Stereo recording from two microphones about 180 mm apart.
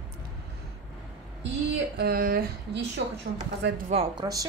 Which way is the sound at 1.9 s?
60° right (ahead or behind).